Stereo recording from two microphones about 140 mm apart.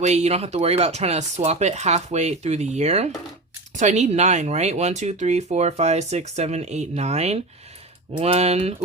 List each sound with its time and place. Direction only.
0.0 s speech: 50° right (ahead or behind)